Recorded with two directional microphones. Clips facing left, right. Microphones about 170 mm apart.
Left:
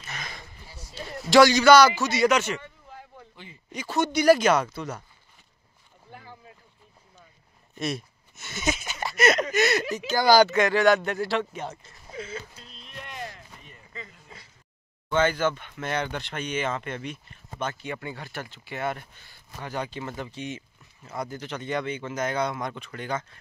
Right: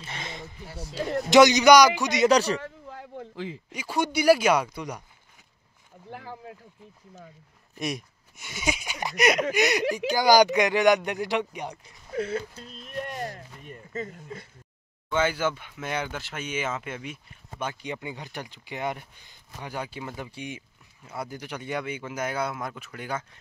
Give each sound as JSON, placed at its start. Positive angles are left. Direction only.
{"t": 0.0, "sound": "a sound", "side_deg": -25}
{"t": 0.7, "sound": "speech", "side_deg": -65}
{"t": 1.3, "sound": "speech", "side_deg": -20}
{"t": 2.2, "sound": "speech", "side_deg": -35}
{"t": 2.6, "sound": "a sound", "side_deg": -65}
{"t": 3.7, "sound": "speech", "side_deg": -10}
{"t": 6.0, "sound": "speech", "side_deg": -75}
{"t": 7.7, "sound": "speech", "side_deg": -10}
{"t": 12.1, "sound": "a sound", "side_deg": -60}
{"t": 15.0, "sound": "speech", "side_deg": -10}